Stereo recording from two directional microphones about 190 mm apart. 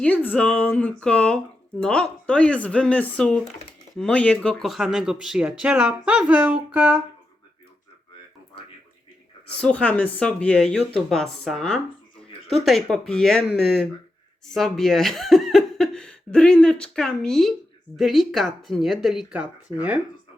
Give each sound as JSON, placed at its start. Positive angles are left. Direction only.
{"t": 0.0, "sound": "speech", "side_deg": 10}
{"t": 9.5, "sound": "speech", "side_deg": 5}